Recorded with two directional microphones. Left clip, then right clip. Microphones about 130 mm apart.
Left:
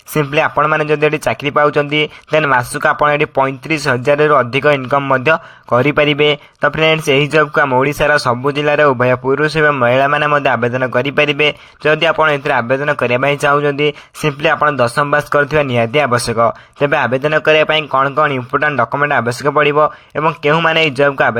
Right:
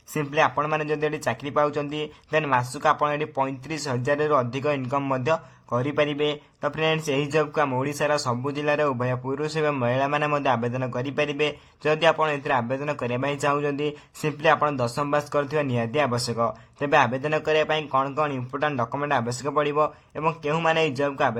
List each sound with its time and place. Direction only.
0.1 s a man's voice: 30° left (ahead or behind)